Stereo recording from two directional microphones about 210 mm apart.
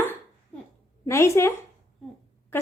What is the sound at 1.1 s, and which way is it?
Speech, 15° left (ahead or behind).